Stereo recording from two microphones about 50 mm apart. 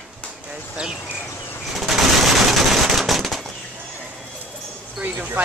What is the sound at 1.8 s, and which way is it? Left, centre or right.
Machine gun, centre.